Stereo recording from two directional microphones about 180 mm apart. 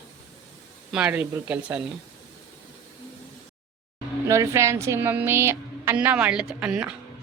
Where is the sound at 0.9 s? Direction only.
5° right (ahead or behind).